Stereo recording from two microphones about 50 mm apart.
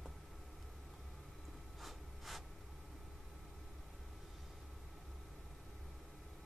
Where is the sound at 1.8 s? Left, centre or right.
Centre.